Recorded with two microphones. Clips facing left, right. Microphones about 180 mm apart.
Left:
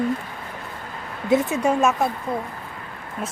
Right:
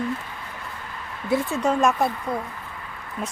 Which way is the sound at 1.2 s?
20° left (ahead or behind).